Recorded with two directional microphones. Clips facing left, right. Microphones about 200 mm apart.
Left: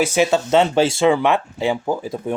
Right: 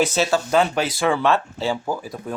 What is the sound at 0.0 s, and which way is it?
Speech, 15° left (ahead or behind).